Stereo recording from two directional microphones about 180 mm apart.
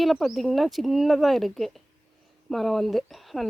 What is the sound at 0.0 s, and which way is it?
Speech, centre (ahead or behind).